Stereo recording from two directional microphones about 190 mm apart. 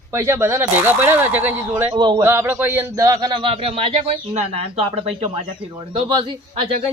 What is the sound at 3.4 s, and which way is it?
Speech, 30° right (ahead or behind).